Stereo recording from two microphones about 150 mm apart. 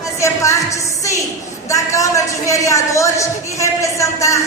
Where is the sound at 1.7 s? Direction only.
20° left (ahead or behind).